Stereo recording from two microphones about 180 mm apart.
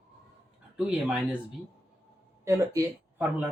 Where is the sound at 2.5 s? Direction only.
15° right (ahead or behind).